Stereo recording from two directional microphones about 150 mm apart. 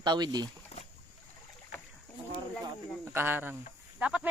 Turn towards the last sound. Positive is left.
turn(degrees=-10)  # may be behind; listen again after turning